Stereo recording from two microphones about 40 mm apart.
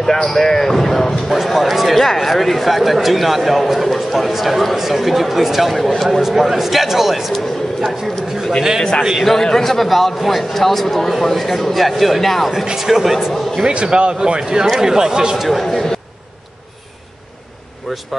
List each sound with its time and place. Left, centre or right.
0.0 s speech: centre
1.3 s speech: centre
7.3 s speech: centre
12.7 s a man's voice: centre
13.6 s a man's voice: centre
15.3 s speech: centre
15.7 s a man's voice: centre
17.9 s speech: centre